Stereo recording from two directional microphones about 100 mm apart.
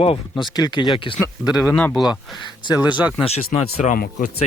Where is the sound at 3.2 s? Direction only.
90° left.